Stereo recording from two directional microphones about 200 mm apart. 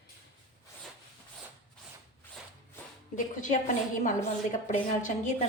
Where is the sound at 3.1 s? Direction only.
40° left (ahead or behind).